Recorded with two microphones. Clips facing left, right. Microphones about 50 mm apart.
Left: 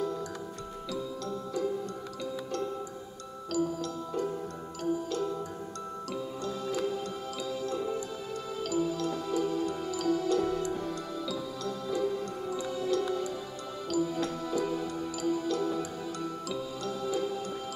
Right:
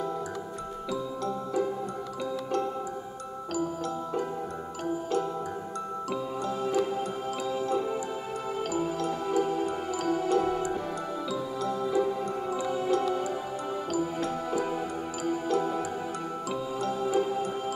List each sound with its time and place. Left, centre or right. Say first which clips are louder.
6.4 s music: right 4 dB; right
16.8 s music: right 5 dB; right